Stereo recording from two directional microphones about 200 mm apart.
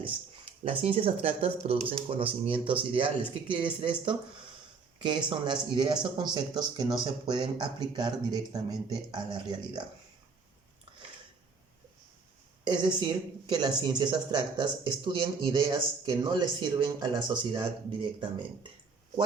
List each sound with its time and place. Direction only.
0.0 s speech: 30° right (ahead or behind)
12.6 s speech: 20° right (ahead or behind)